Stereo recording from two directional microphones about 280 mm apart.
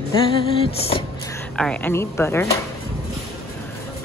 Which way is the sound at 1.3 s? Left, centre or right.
Centre.